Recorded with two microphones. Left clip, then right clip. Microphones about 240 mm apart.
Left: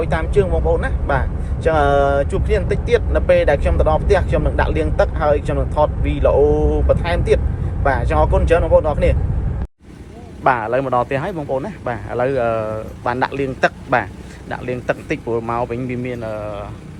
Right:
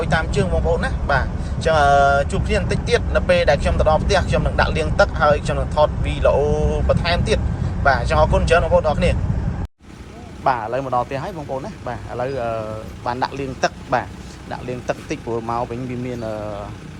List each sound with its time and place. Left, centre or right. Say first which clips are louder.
0.0 s speech: left 3 dB; centre
10.4 s speech: left 4 dB; centre